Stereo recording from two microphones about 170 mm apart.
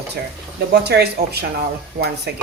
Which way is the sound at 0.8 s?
75° right (ahead or behind).